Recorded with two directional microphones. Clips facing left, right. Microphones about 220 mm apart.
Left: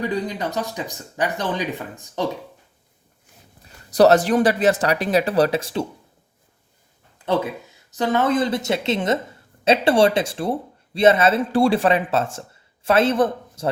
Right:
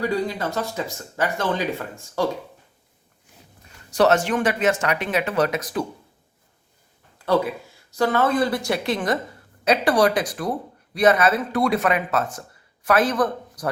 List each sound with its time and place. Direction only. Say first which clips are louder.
0.0 s speech: even; 20° left (ahead or behind)
3.6 s speech: left 4 dB; 35° left (ahead or behind)
7.2 s speech: right 1 dB; 20° left (ahead or behind)